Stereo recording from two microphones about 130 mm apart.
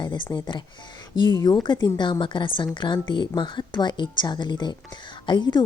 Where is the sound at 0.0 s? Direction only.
35° left (ahead or behind).